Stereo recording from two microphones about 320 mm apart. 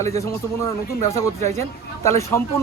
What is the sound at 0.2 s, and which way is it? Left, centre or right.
Speech, centre.